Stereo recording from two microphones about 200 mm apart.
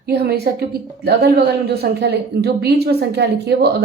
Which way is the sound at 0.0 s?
50° right (ahead or behind).